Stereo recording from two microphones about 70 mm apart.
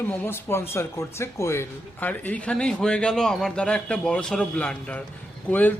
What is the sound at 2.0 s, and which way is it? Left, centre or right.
A man's voice, left.